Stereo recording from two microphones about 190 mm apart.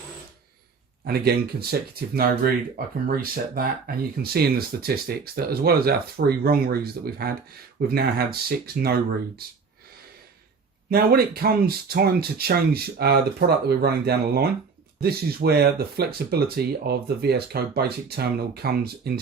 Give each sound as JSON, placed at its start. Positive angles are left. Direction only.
{"t": 1.0, "sound": "speech", "side_deg": -55}
{"t": 10.8, "sound": "speech", "side_deg": -50}